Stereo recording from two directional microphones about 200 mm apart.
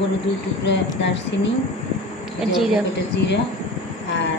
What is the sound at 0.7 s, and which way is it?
Speech, 60° left (ahead or behind).